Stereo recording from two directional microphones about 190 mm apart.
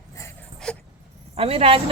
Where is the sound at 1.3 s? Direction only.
30° right (ahead or behind).